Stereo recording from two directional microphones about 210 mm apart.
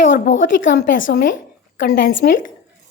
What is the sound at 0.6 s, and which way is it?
A woman's voice, 40° left (ahead or behind).